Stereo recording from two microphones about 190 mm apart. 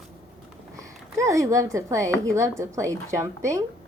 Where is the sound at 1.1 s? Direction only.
15° right (ahead or behind).